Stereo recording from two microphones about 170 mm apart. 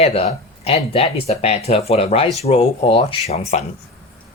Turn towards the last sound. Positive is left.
turn(degrees=40)  # may be behind; listen again after turning